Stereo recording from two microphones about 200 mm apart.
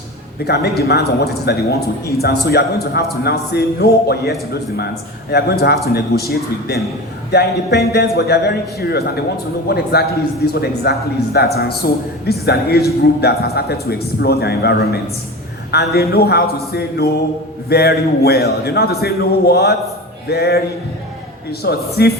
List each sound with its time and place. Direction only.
0.4 s a man's voice: 55° left (ahead or behind)
17.7 s a man's voice: 50° left (ahead or behind)
21.6 s a man's voice: 50° left (ahead or behind)